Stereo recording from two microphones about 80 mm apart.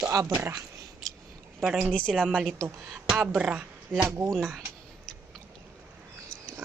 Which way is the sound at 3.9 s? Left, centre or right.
Right.